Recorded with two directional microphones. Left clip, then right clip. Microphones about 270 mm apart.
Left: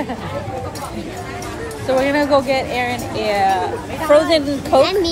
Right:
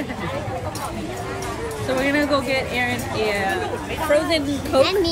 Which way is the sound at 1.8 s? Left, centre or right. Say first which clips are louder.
Left 5 dB; centre.